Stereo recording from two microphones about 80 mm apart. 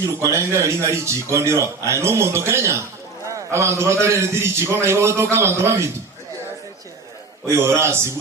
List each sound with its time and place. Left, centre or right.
0.0 s a man's voice: right
7.4 s a man's voice: right